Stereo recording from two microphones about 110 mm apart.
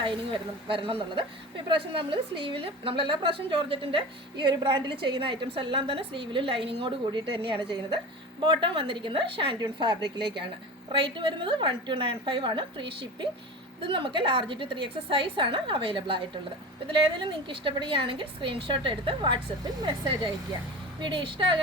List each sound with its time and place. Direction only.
0.7 s a woman's voice: 55° right (ahead or behind)
9.6 s a woman's voice: 40° right (ahead or behind)